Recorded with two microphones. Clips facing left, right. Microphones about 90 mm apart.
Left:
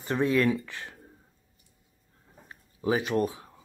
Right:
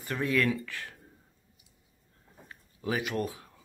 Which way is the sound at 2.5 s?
25° left (ahead or behind).